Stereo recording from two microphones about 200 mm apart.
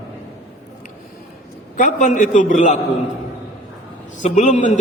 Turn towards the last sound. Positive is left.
turn(degrees=35)  # may be behind; listen again after turning